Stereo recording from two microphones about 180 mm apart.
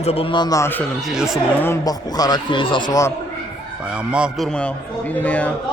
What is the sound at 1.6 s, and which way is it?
Speech, 15° left (ahead or behind).